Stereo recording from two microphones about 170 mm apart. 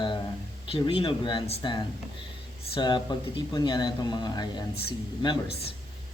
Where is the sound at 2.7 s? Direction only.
25° left (ahead or behind).